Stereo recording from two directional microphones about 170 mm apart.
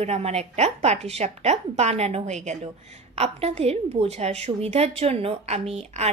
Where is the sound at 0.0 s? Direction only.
40° right (ahead or behind).